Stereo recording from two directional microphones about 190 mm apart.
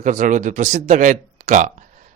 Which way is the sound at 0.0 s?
40° right (ahead or behind).